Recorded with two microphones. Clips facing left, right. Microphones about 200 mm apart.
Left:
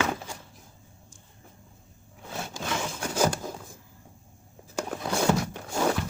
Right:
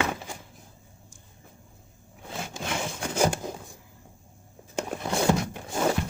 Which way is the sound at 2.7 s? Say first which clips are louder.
Even; 15° right (ahead or behind).